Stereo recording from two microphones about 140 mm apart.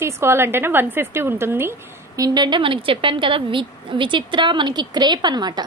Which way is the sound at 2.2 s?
30° right (ahead or behind).